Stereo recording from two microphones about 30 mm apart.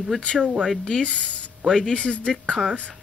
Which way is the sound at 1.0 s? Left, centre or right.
Left.